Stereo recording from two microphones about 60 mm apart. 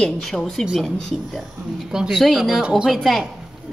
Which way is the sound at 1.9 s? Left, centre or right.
Centre.